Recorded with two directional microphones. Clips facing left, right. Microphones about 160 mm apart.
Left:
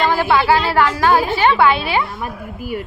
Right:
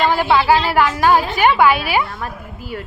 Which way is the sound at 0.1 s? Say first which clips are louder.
Even; 15° right (ahead or behind).